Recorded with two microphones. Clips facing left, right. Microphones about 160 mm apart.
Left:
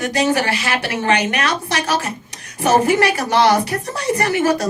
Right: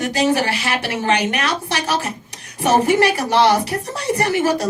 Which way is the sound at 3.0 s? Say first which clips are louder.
Even; 30° right (ahead or behind).